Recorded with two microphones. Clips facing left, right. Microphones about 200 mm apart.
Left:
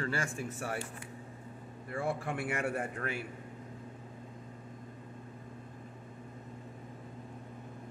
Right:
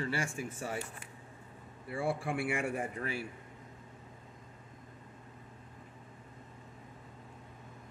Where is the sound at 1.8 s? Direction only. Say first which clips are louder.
Right 1 dB; 10° right (ahead or behind).